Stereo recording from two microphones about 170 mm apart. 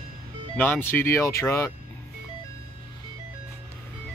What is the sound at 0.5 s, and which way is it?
Speech, 10° left (ahead or behind).